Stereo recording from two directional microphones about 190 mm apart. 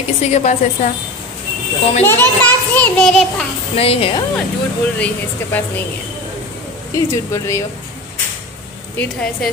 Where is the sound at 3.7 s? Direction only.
30° left (ahead or behind).